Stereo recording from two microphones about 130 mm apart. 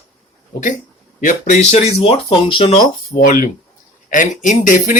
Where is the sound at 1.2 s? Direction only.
70° left (ahead or behind); by 2.8 s 45° left (ahead or behind).